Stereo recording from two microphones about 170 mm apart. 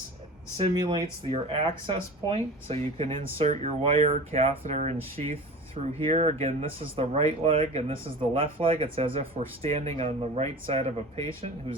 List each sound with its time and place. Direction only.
0.5 s speech: 30° right (ahead or behind)